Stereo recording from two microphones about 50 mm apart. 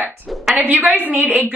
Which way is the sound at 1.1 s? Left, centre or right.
Right.